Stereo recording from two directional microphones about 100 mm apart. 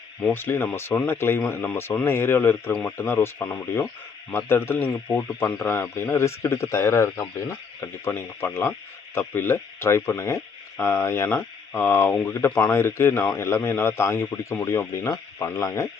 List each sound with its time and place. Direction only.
0.3 s speech: 20° left (ahead or behind)
12.5 s speech: 15° left (ahead or behind)
12.7 s speech: 25° left (ahead or behind)